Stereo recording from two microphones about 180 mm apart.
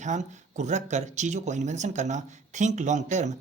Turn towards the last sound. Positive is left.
turn(degrees=-40)  # may be behind; listen again after turning